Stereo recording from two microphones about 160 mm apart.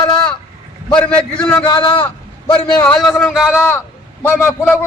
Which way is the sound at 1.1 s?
5° left (ahead or behind).